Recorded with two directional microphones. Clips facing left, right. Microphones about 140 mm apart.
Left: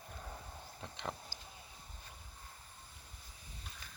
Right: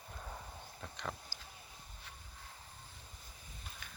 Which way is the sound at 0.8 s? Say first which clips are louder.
Left 1 dB; 30° left (ahead or behind).